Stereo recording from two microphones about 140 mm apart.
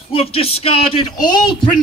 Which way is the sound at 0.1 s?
45° left (ahead or behind).